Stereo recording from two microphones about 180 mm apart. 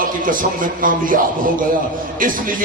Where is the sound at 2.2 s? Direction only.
50° right (ahead or behind).